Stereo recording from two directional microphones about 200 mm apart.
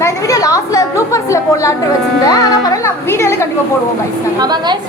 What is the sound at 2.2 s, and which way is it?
Speech, 20° left (ahead or behind).